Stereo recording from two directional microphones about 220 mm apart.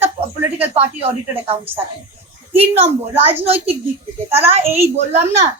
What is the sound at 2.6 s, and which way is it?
Speech, 25° right (ahead or behind).